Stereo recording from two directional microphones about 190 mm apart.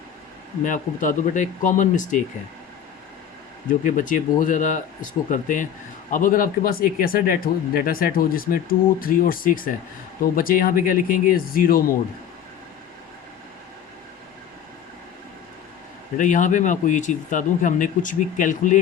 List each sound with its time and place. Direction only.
0.6 s speech: 40° left (ahead or behind)
3.7 s speech: 45° left (ahead or behind)
16.1 s speech: 40° left (ahead or behind)